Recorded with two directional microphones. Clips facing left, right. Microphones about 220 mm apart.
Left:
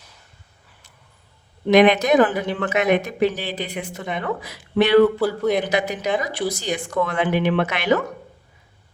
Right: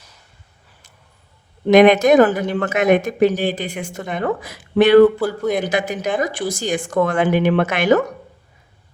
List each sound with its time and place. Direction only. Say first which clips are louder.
1.6 s speech: right 4 dB; 45° right (ahead or behind)
5.4 s speech: even; centre (ahead or behind)
5.6 s speech: right 1 dB; 50° right (ahead or behind)